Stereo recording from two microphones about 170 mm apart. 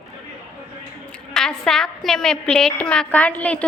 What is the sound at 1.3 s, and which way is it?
A woman's voice, 5° left (ahead or behind).